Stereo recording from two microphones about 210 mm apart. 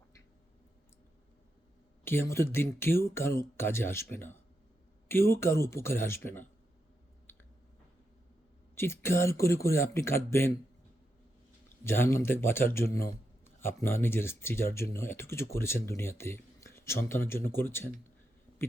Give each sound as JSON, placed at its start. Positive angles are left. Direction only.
{"t": 2.0, "sound": "a man's voice", "side_deg": 10}
{"t": 7.3, "sound": "clicking", "side_deg": 10}
{"t": 8.7, "sound": "a man's voice", "side_deg": 10}
{"t": 11.8, "sound": "a man's voice", "side_deg": 10}